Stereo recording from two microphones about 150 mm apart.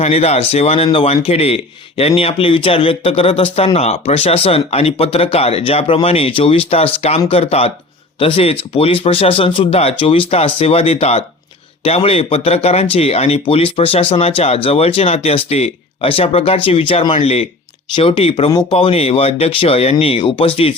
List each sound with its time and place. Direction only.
0.0 s speech: 45° left (ahead or behind)